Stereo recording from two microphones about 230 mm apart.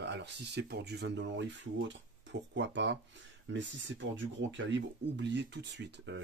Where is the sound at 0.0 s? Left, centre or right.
Right.